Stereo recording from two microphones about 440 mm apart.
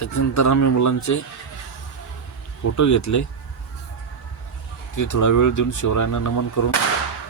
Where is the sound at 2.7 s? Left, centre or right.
Left.